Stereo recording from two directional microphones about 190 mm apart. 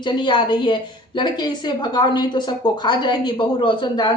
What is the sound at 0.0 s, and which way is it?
A woman's voice, 25° left (ahead or behind).